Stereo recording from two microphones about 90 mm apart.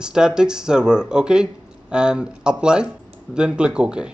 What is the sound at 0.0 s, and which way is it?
Speech, 10° right (ahead or behind).